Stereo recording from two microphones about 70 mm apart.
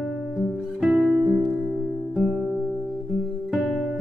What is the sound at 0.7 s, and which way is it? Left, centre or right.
Music, centre.